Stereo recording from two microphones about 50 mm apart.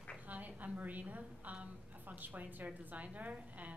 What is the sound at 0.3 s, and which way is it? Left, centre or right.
A woman's voice, right.